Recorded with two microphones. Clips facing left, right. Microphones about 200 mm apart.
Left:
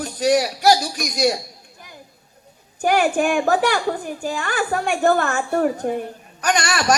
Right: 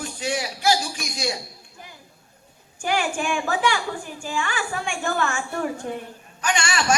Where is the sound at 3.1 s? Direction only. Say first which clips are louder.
Left 7 dB; 40° left (ahead or behind).